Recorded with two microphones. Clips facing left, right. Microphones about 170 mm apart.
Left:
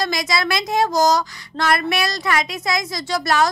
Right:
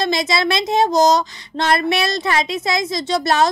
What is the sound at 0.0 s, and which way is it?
Music, 25° right (ahead or behind).